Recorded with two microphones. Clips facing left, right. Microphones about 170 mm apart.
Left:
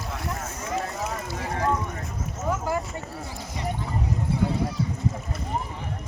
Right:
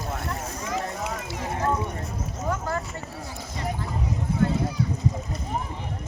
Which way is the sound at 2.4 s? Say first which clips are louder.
Left 2 dB; 10° left (ahead or behind).